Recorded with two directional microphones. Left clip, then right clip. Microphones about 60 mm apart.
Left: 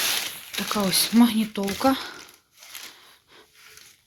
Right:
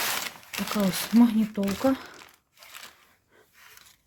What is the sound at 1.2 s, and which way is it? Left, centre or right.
Speech, centre.